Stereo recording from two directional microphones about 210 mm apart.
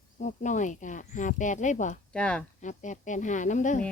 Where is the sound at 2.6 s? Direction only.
35° left (ahead or behind).